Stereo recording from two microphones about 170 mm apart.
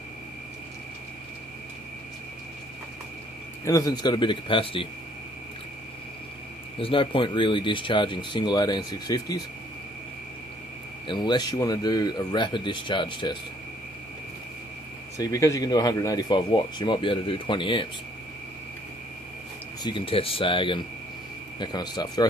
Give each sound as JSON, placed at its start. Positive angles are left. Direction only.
{"t": 3.6, "sound": "speech", "side_deg": 20}
{"t": 6.8, "sound": "speech", "side_deg": 30}
{"t": 11.1, "sound": "speech", "side_deg": 25}
{"t": 15.1, "sound": "speech", "side_deg": 20}
{"t": 19.8, "sound": "speech", "side_deg": 30}